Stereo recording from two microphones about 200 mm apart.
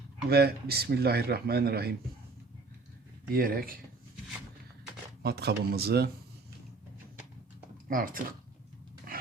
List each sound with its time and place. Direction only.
0.3 s a man's voice: 50° right (ahead or behind)
3.3 s a man's voice: 45° right (ahead or behind)
5.2 s a man's voice: 55° right (ahead or behind)
7.9 s a man's voice: 45° right (ahead or behind)